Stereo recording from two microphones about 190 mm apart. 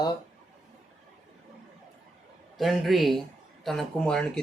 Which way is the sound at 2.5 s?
Centre (ahead or behind).